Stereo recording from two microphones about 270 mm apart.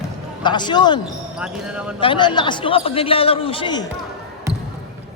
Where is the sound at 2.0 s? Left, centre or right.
Centre.